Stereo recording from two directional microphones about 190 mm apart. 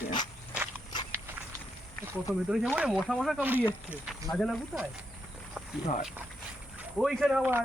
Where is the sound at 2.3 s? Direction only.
5° right (ahead or behind).